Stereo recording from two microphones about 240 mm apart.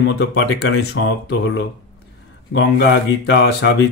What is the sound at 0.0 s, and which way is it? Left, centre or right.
Speech, left.